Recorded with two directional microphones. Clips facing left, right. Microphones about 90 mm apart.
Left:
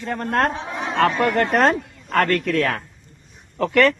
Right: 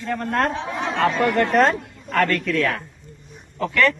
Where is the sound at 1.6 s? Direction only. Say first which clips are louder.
Left 3 dB; 50° left (ahead or behind).